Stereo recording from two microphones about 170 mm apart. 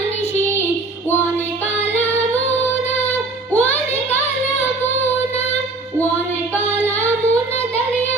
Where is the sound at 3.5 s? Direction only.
10° left (ahead or behind).